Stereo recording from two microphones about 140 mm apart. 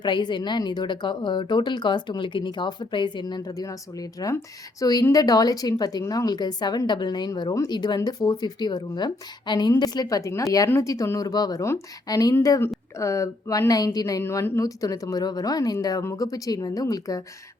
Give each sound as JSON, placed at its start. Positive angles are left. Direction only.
{"t": 0.0, "sound": "speech", "side_deg": 30}